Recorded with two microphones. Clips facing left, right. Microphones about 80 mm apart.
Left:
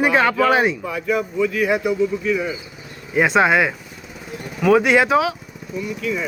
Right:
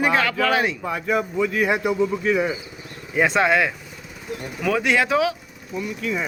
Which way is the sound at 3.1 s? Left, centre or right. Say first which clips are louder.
Left 3 dB; centre.